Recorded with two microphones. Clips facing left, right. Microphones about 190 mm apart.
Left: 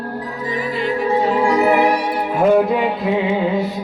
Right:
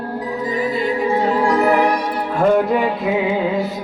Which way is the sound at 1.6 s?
5° left (ahead or behind).